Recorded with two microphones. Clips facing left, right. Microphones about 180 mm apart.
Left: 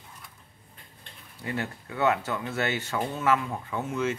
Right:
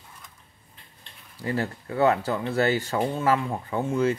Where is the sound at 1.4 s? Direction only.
35° right (ahead or behind).